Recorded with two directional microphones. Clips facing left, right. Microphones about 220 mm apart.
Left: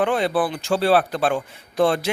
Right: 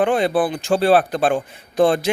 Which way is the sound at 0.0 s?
15° right (ahead or behind).